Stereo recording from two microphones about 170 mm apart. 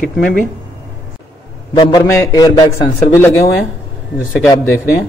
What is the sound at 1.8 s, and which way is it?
Speech, 20° left (ahead or behind).